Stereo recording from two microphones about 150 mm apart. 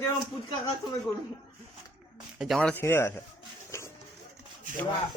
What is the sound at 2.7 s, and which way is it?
Speech, 15° left (ahead or behind).